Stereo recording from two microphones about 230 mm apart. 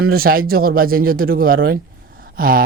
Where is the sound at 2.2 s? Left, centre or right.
Right.